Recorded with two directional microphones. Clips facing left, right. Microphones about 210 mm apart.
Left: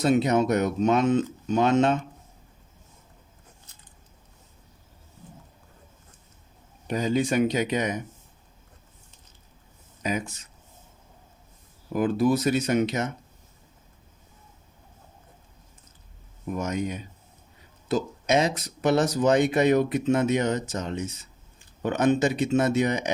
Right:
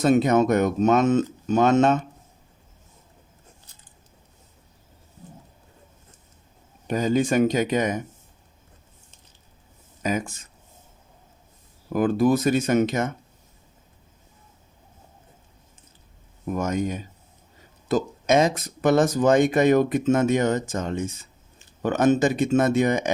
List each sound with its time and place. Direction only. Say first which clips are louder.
0.0 s speech: right 3 dB; 50° right (ahead or behind)
6.8 s speech: right 3 dB; 45° right (ahead or behind)
10.0 s speech: right 3 dB; 45° right (ahead or behind)
11.9 s speech: right 3 dB; 50° right (ahead or behind)
16.5 s speech: right 3 dB; 45° right (ahead or behind)